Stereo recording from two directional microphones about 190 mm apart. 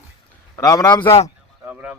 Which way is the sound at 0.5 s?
20° left (ahead or behind).